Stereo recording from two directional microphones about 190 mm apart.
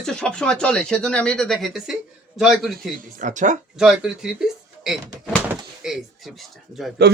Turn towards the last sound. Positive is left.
turn(degrees=0)  # may be behind; listen again after turning